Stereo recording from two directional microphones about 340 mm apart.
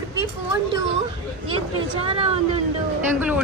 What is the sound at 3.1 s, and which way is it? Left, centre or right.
Speech, centre.